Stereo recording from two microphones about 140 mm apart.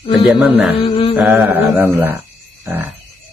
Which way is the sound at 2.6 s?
15° right (ahead or behind).